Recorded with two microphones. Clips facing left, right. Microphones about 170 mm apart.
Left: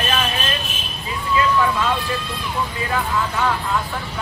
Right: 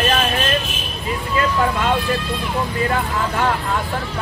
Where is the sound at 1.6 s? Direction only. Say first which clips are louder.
Right 1 dB; 45° right (ahead or behind).